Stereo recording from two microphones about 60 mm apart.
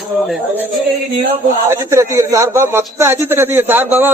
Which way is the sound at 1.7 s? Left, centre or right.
Right.